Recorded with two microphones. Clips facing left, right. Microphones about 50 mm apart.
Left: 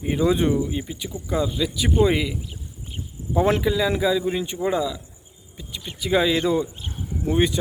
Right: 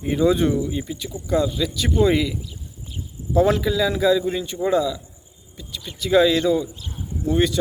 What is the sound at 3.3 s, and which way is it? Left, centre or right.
Speech, left.